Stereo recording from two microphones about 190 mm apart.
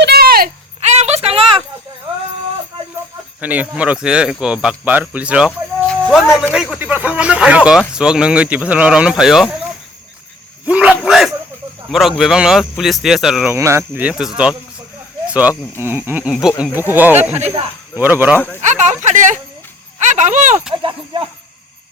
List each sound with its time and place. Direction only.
0.0 s a sound: 55° right (ahead or behind)
0.8 s a sound: 35° right (ahead or behind)
3.4 s speech: 10° right (ahead or behind)
5.5 s speech: 5° left (ahead or behind)
10.7 s speech: 5° right (ahead or behind)
11.0 s bow-wow: centre (ahead or behind)
11.9 s speech: centre (ahead or behind)
13.5 s speech: 15° right (ahead or behind)
17.4 s speech: 35° right (ahead or behind)
17.9 s speech: 10° right (ahead or behind)
18.3 s speech: 10° left (ahead or behind)
18.6 s speech: 40° right (ahead or behind)
19.0 s a sound: 40° right (ahead or behind)
20.8 s a sound: 25° right (ahead or behind)